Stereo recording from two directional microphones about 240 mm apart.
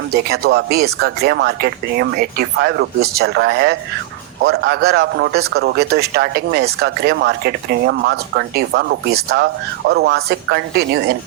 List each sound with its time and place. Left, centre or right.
0.1 s a man's voice: right